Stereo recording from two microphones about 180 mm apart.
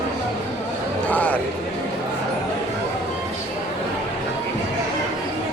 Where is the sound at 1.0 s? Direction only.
10° left (ahead or behind).